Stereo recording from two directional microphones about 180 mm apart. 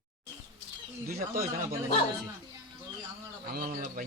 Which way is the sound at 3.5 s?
50° right (ahead or behind).